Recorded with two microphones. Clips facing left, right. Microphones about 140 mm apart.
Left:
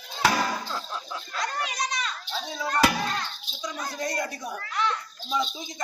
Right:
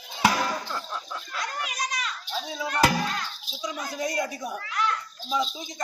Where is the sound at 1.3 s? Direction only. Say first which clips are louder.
Left 3 dB; 35° left (ahead or behind).